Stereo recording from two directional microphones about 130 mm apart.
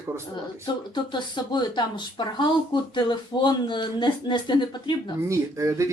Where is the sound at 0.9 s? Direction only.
35° left (ahead or behind).